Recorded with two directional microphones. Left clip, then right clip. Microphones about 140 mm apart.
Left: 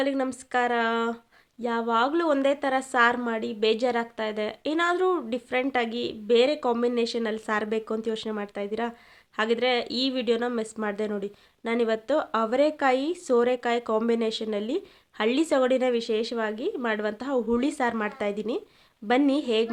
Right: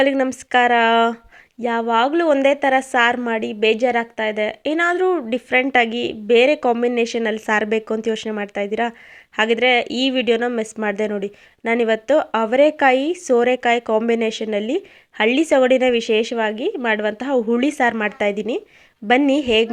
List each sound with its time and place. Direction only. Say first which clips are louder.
0.0 s speech: right 10 dB; 35° right (ahead or behind)
1.6 s a woman's voice: right 7 dB; 25° right (ahead or behind)